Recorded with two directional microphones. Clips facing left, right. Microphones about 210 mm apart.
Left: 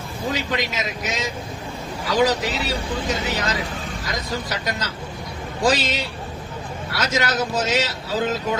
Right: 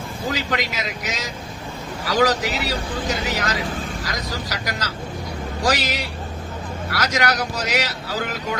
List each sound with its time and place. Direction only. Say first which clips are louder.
0.3 s speech: even; 25° left (ahead or behind)